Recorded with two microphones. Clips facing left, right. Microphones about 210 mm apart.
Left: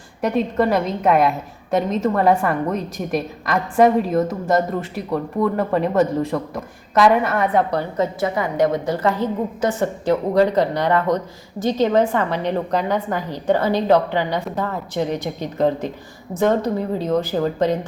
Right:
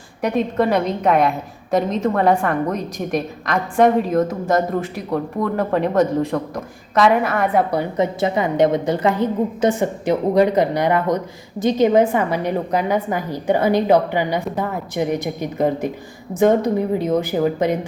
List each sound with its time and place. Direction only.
0.2 s a woman's voice: centre (ahead or behind)
7.8 s a woman's voice: 15° right (ahead or behind)